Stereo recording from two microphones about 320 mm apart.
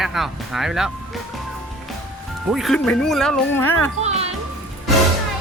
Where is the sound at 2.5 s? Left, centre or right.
Centre.